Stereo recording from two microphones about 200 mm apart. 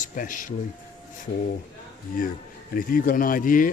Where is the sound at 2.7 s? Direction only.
45° left (ahead or behind).